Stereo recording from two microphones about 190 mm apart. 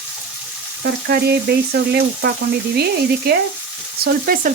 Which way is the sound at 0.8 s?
55° right (ahead or behind).